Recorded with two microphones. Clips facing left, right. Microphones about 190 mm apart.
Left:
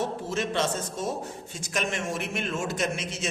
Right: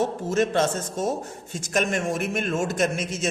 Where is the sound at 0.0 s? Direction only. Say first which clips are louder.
Right 6 dB; 45° right (ahead or behind).